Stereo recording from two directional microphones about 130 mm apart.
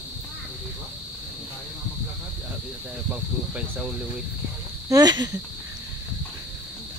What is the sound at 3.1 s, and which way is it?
Speech, 10° right (ahead or behind).